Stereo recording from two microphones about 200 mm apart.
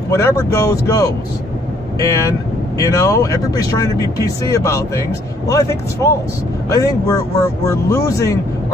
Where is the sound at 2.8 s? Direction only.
15° left (ahead or behind).